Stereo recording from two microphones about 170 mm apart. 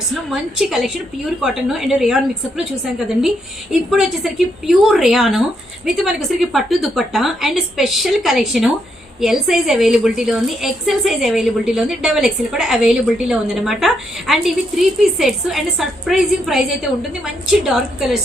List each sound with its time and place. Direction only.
0.1 s a woman's voice: centre (ahead or behind)